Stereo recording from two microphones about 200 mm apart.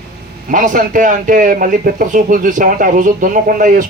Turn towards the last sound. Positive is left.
turn(degrees=-40)  # may be behind; listen again after turning